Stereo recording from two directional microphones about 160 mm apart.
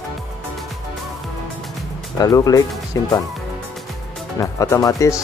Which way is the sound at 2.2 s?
20° left (ahead or behind).